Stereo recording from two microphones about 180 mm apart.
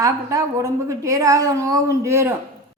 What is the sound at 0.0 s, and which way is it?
A woman's voice, 20° right (ahead or behind).